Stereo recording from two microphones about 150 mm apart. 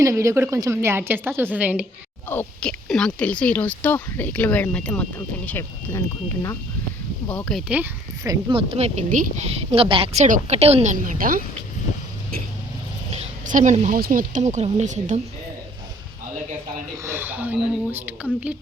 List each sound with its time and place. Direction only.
0.0 s speech: 20° right (ahead or behind)
2.3 s speech: 10° left (ahead or behind)
7.3 s speech: 5° left (ahead or behind)
8.2 s speech: 25° right (ahead or behind)
8.5 s speech: 45° right (ahead or behind)
10.9 s a woman's voice: 65° right (ahead or behind)
13.1 s a sound: 55° right (ahead or behind)
14.0 s speech: 65° right (ahead or behind)
17.0 s speech: 15° right (ahead or behind)